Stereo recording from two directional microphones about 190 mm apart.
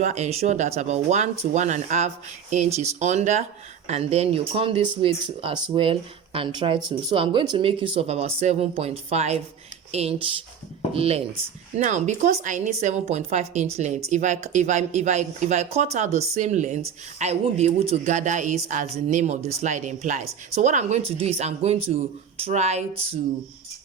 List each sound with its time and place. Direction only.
0.0 s speech: 35° right (ahead or behind)